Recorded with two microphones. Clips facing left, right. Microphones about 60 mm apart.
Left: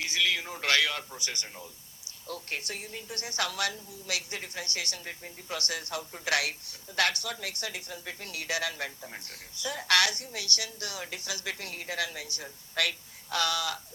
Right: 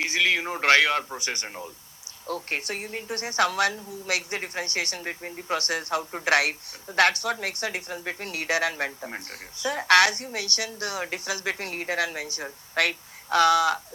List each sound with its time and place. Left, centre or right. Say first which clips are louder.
0.0 s a sound: right 6 dB; right
0.7 s a woman's voice: right 7 dB; right
2.2 s a woman's voice: right 7 dB; right
4.9 s a woman's voice: right 8 dB; right